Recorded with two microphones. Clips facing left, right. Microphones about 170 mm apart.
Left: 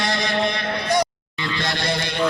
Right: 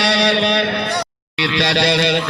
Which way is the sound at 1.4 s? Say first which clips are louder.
Right 8 dB; 80° right.